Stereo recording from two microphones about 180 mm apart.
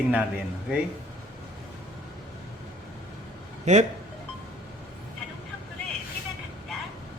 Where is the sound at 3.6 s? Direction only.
40° right (ahead or behind).